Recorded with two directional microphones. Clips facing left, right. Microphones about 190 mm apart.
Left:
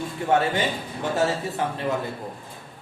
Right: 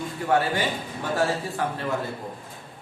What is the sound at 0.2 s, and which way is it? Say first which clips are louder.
A man's voice: left 1 dB; 20° left (ahead or behind).